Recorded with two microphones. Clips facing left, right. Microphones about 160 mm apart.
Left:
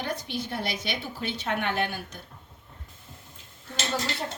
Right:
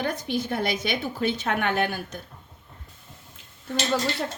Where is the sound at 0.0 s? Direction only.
50° right (ahead or behind).